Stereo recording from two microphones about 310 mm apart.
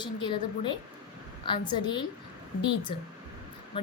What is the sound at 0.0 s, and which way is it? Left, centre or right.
A woman's voice, centre.